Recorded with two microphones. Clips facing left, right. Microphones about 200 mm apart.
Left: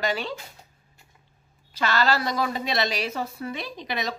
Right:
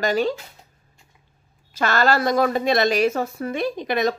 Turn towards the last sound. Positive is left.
turn(degrees=-50)  # may be behind; listen again after turning